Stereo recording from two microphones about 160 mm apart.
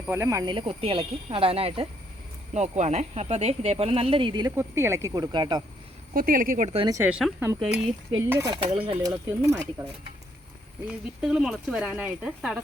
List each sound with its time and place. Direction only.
0.1 s speech: 15° right (ahead or behind)
0.5 s speech: 35° right (ahead or behind)
4.5 s speech: 15° right (ahead or behind)
6.1 s speech: 60° right (ahead or behind)
6.7 s speech: 25° right (ahead or behind)
7.0 s speech: 5° right (ahead or behind)
8.3 s speech: 15° right (ahead or behind)
8.6 s speech: 35° right (ahead or behind)
9.0 s speech: 20° right (ahead or behind)
10.8 s speech: 5° right (ahead or behind)